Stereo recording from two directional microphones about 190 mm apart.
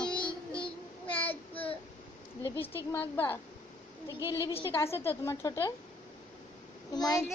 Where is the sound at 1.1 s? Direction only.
30° left (ahead or behind).